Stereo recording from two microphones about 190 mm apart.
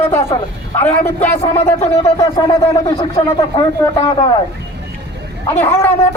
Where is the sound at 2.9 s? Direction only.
30° left (ahead or behind).